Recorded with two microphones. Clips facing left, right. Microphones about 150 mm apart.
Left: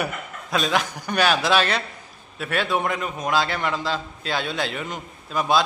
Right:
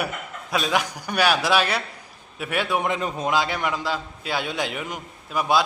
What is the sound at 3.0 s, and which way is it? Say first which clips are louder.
Speech: right 2 dB; 30° right (ahead or behind).